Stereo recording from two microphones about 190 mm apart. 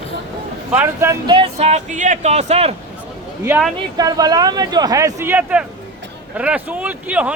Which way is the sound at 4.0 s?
20° right (ahead or behind).